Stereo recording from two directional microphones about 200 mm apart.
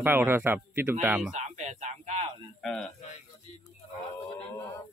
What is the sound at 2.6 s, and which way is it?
Speech, 5° left (ahead or behind).